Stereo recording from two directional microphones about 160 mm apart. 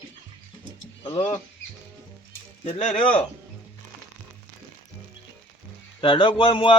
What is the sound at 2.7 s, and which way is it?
Speech, 50° left (ahead or behind).